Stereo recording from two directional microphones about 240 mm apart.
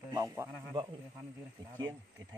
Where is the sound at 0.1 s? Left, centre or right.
Centre.